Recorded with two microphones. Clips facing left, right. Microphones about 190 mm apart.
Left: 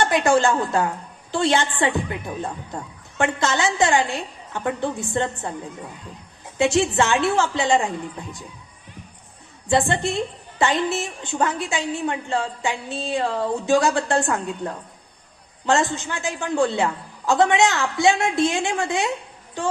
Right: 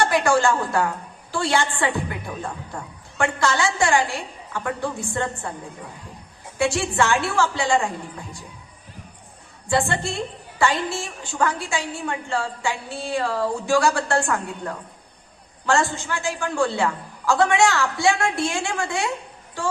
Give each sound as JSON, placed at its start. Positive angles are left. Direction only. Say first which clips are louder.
{"t": 0.0, "sound": "a woman's voice", "louder": "left 1 dB", "side_deg": 20}
{"t": 6.6, "sound": "a woman's voice", "louder": "left 3 dB", "side_deg": 20}
{"t": 9.6, "sound": "a woman's voice", "louder": "left 2 dB", "side_deg": 20}